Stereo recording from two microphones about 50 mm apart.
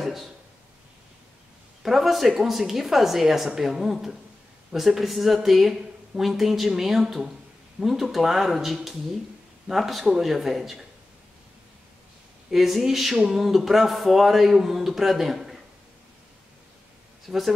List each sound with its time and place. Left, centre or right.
0.0 s a sound: centre
1.8 s speech: centre
12.4 s speech: centre
17.3 s speech: centre